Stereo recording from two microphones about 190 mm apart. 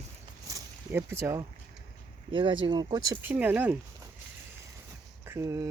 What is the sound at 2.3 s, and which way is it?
Speech, 25° right (ahead or behind).